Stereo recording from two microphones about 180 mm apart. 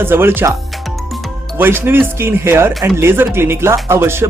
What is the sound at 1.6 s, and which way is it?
Speech, 10° right (ahead or behind).